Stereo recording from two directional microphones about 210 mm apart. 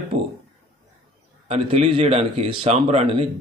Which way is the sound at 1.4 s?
25° right (ahead or behind).